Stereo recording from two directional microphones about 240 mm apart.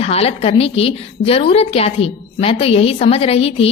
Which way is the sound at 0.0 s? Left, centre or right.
Left.